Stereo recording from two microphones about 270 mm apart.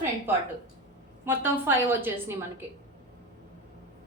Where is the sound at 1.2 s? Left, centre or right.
Centre.